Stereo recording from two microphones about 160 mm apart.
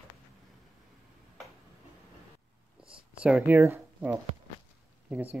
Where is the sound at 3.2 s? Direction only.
5° right (ahead or behind).